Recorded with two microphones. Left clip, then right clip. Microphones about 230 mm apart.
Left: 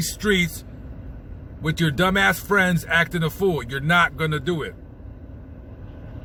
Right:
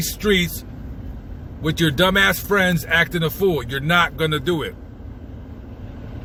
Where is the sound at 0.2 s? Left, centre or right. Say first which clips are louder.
Right 2 dB; left.